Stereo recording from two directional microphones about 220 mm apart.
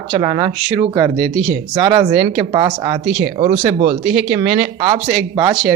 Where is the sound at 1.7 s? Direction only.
15° right (ahead or behind).